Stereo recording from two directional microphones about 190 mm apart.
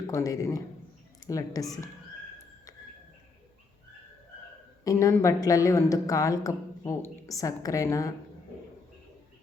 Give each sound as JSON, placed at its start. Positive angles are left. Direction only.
{"t": 0.1, "sound": "a woman's voice", "side_deg": 15}
{"t": 4.8, "sound": "a woman's voice", "side_deg": 15}